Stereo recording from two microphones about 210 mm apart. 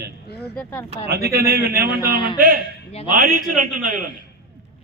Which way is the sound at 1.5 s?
45° right (ahead or behind).